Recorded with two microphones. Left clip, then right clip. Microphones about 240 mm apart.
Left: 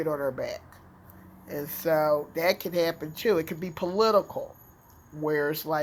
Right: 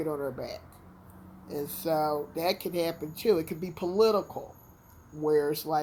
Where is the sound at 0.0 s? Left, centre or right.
Left.